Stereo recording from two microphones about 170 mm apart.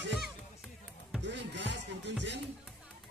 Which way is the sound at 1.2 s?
90° right.